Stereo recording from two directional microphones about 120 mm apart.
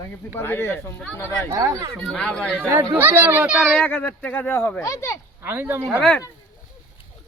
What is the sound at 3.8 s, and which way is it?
Speech, 15° left (ahead or behind).